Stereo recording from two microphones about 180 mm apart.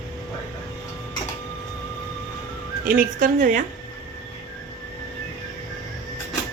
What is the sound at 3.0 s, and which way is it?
Speech, 45° right (ahead or behind).